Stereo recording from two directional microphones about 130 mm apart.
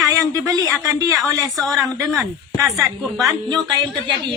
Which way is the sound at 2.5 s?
25° right (ahead or behind).